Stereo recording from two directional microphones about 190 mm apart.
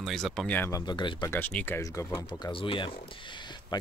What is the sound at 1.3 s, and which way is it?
Speech, 10° left (ahead or behind).